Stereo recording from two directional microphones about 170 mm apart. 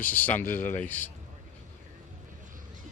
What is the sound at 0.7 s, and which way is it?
Speech, 10° left (ahead or behind).